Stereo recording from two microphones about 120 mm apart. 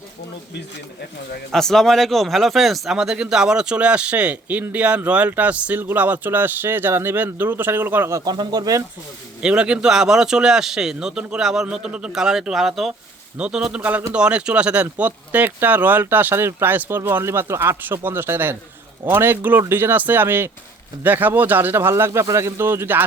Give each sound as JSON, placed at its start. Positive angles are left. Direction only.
{"t": 1.5, "sound": "speech", "side_deg": 5}
{"t": 8.2, "sound": "speech", "side_deg": -35}
{"t": 9.4, "sound": "a man's voice", "side_deg": -10}